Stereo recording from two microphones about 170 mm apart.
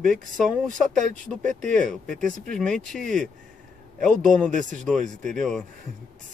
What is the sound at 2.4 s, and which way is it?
Speech, 5° left (ahead or behind).